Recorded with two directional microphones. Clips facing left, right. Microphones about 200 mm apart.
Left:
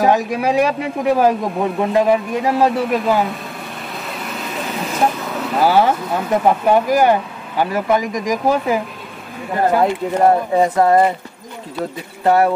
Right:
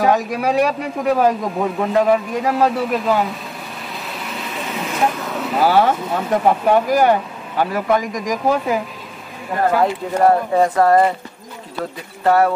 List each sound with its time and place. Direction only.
0.0 s speech: 5° left (ahead or behind)
4.8 s speech: centre (ahead or behind)
9.7 s speech: 20° left (ahead or behind)
12.3 s a sound: 20° left (ahead or behind)